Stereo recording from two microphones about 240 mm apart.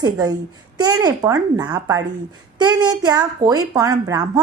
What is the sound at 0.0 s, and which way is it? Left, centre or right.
A woman's voice, centre.